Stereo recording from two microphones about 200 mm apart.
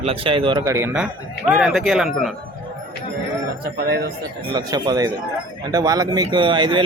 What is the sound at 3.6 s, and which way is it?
Speech, 50° right (ahead or behind).